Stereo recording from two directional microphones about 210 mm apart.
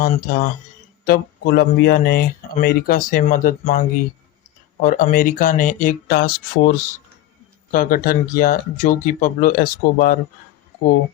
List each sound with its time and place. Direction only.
0.0 s speech: 40° left (ahead or behind)